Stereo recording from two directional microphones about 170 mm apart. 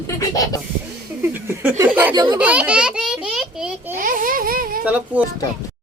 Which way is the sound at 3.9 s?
55° right (ahead or behind).